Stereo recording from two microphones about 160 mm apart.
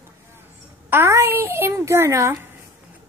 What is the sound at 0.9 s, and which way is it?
A child's voice, 15° right (ahead or behind).